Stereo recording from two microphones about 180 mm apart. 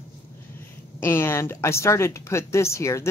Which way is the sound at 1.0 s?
15° left (ahead or behind).